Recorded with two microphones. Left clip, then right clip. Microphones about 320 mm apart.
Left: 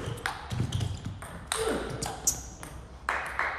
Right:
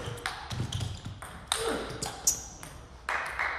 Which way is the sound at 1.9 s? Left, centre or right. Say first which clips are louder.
Even; centre.